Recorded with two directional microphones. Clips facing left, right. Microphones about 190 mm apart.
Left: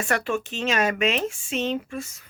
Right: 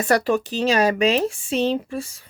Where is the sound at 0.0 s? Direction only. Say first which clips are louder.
Right 6 dB; 35° right (ahead or behind).